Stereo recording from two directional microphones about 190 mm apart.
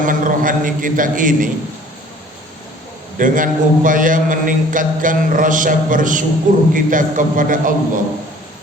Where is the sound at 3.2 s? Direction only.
45° right (ahead or behind).